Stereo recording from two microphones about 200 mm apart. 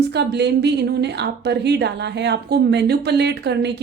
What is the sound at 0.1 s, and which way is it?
Speech, 55° right (ahead or behind).